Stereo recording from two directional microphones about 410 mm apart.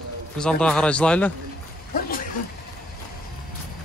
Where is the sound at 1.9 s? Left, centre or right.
Left.